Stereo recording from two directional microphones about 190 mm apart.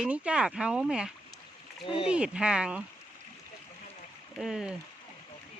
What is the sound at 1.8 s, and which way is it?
Speech, 30° left (ahead or behind).